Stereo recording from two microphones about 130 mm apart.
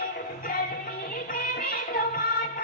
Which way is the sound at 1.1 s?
90° left.